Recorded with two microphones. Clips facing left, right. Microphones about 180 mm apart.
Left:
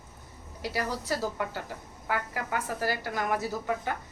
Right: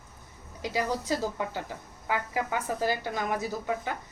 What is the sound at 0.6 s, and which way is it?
A woman's voice, 20° right (ahead or behind).